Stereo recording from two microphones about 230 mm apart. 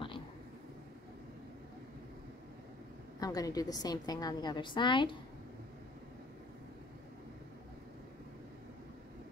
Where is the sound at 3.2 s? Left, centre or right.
Centre.